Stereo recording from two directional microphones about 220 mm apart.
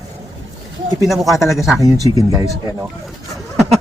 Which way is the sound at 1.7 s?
15° right (ahead or behind).